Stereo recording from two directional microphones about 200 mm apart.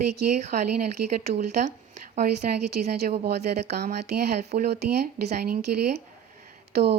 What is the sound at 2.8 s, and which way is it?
A woman's voice, 45° right (ahead or behind).